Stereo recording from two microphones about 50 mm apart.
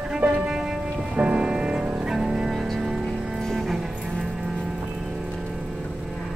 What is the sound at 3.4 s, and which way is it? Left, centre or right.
Music, centre.